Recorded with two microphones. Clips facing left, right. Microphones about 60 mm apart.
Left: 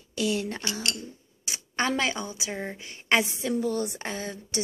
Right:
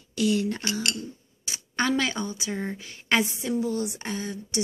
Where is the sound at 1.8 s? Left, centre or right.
Left.